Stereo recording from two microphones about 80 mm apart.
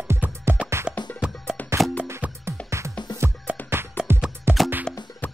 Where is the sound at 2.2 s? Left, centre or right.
Centre.